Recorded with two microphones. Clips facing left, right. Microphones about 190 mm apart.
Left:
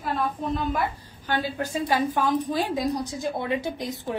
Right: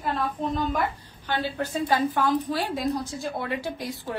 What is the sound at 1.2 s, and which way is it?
A woman's voice, 10° left (ahead or behind).